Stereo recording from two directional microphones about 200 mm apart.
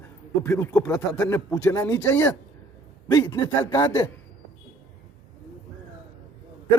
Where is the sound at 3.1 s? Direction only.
20° left (ahead or behind).